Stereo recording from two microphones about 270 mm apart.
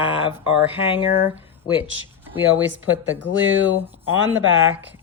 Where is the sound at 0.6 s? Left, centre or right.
Centre.